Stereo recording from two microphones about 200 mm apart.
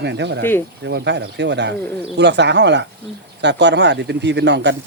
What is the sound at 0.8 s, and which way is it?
Speech, 60° right (ahead or behind).